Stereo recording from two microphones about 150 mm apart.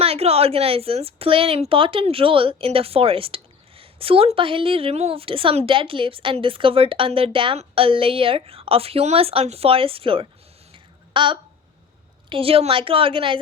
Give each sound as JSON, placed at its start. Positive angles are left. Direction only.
{"t": 0.0, "sound": "a woman's voice", "side_deg": -40}
{"t": 10.7, "sound": "a sound", "side_deg": -35}
{"t": 12.3, "sound": "a woman's voice", "side_deg": -40}